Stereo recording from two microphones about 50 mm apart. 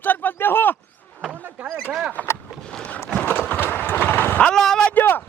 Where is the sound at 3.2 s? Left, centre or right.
Left.